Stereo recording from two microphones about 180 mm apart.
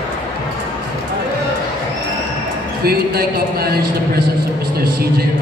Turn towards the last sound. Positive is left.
turn(degrees=-60)  # may be behind; listen again after turning